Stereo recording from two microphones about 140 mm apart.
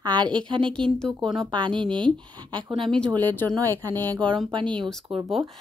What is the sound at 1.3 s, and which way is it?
Speech, 35° right (ahead or behind).